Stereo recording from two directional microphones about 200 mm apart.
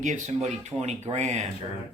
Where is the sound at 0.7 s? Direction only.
10° right (ahead or behind).